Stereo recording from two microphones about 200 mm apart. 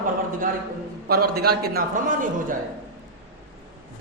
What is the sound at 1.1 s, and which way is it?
A man's voice, 50° right (ahead or behind).